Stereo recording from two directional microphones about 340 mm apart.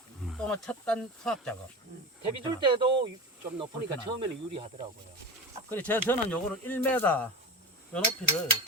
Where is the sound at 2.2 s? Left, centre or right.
Centre.